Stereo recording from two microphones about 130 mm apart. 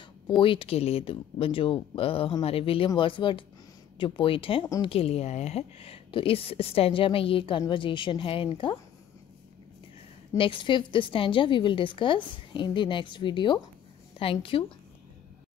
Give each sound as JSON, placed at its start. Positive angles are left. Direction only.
{"t": 0.4, "sound": "a woman's voice", "side_deg": 45}
{"t": 10.3, "sound": "a woman's voice", "side_deg": 40}